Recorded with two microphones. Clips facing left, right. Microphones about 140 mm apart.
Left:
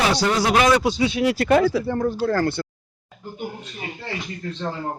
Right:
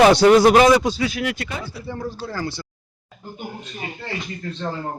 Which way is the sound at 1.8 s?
55° left (ahead or behind).